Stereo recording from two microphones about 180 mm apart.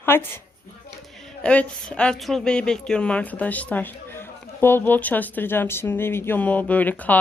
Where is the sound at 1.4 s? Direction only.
5° left (ahead or behind).